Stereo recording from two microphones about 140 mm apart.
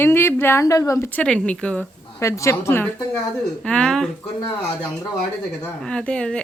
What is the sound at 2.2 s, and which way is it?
Speech, 20° left (ahead or behind).